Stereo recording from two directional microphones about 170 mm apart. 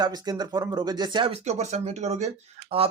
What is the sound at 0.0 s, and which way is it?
Speech, 25° right (ahead or behind).